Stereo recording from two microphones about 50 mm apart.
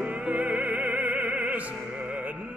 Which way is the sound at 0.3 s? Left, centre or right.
Right.